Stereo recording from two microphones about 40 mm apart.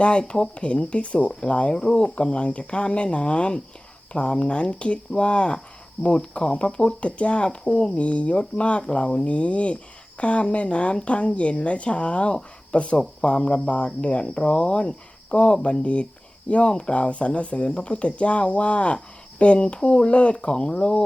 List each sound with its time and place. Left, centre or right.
0.0 s speech: left